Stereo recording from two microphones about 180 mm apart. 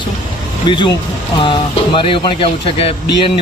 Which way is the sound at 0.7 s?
25° left (ahead or behind).